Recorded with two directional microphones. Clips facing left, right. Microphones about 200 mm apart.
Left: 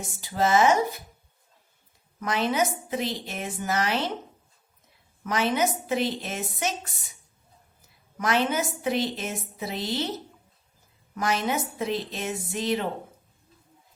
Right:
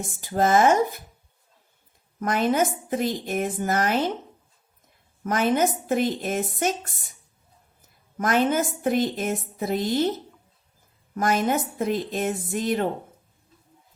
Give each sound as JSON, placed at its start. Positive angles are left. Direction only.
{"t": 0.0, "sound": "speech", "side_deg": -50}
{"t": 2.1, "sound": "speech", "side_deg": -50}
{"t": 5.2, "sound": "speech", "side_deg": -50}
{"t": 8.2, "sound": "speech", "side_deg": -50}